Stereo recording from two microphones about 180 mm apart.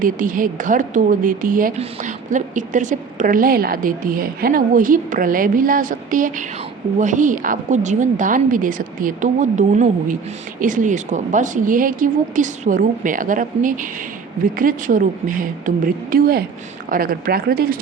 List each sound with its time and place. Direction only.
0.0 s a woman's voice: 50° right (ahead or behind)